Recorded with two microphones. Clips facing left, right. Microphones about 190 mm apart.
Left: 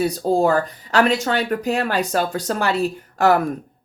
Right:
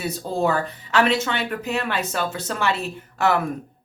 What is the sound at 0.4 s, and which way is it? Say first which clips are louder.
Speech: left 4 dB; 40° left (ahead or behind).